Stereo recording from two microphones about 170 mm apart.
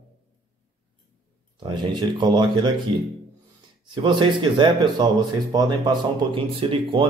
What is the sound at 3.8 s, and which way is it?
Speech, 30° right (ahead or behind).